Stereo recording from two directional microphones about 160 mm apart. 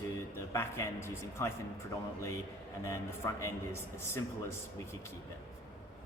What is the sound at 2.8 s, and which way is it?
Speech, 20° left (ahead or behind).